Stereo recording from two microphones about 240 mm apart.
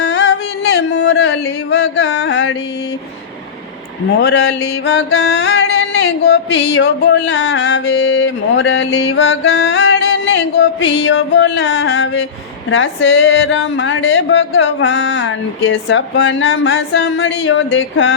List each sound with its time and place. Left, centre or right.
0.1 s music: left
4.2 s music: left